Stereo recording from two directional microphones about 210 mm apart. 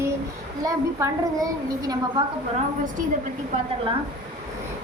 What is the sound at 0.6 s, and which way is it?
A woman's voice, 15° right (ahead or behind).